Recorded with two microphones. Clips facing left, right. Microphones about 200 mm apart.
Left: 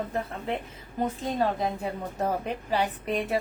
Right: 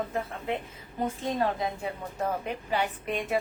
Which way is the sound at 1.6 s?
35° left (ahead or behind).